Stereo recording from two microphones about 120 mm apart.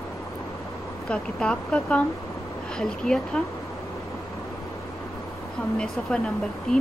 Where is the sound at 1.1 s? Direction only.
5° left (ahead or behind).